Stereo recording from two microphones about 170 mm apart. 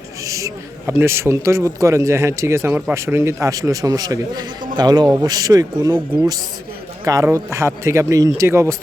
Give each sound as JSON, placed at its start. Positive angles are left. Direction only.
{"t": 0.3, "sound": "a man's voice", "side_deg": -20}